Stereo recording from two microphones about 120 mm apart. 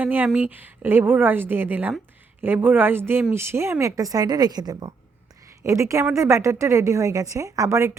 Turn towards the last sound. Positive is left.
turn(degrees=-25)  # may be behind; listen again after turning